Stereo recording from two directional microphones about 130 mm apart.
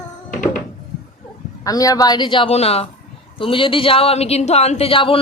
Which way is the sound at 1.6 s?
25° left (ahead or behind).